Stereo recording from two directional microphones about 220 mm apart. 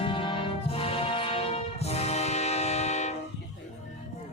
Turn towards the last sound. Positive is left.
turn(degrees=30)  # may be behind; listen again after turning